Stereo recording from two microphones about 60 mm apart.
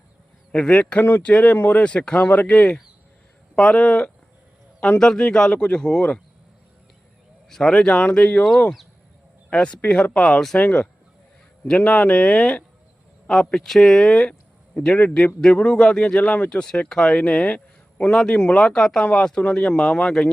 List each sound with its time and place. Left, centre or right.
0.5 s speech: left
1.8 s speech: centre
7.5 s speech: centre
9.5 s speech: centre
10.2 s speech: centre
11.6 s speech: left
12.1 s speech: centre
14.9 s a man's voice: left
18.3 s speech: left
18.6 s speech: centre